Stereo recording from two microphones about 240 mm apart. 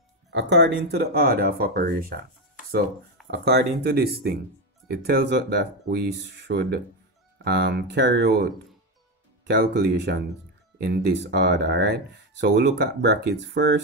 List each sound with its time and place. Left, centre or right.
0.3 s speech: right
3.3 s speech: right